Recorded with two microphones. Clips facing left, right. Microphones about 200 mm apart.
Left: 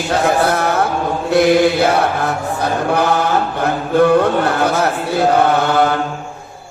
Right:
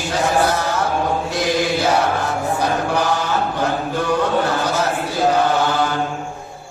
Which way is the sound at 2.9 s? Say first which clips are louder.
Left 4 dB; 60° left (ahead or behind).